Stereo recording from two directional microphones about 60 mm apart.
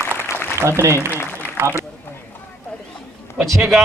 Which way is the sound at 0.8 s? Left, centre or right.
Right.